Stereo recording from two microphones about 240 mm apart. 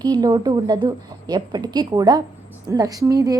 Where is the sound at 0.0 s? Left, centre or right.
Centre.